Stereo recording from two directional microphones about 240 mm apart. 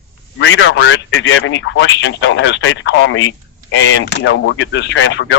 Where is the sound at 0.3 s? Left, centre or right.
Left.